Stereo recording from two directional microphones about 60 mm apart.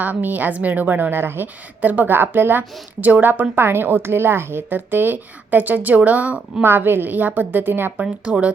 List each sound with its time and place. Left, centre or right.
0.0 s a woman's voice: right
3.5 s a woman's voice: right
6.7 s a woman's voice: right
8.0 s a woman's voice: right